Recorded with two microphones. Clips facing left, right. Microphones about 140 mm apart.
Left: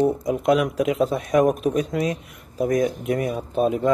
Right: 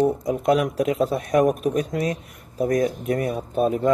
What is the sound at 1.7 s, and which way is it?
Speech, 45° right (ahead or behind).